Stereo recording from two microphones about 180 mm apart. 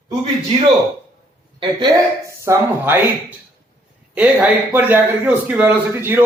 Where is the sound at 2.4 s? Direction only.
15° right (ahead or behind).